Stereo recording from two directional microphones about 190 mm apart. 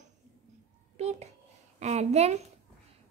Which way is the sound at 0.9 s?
35° right (ahead or behind).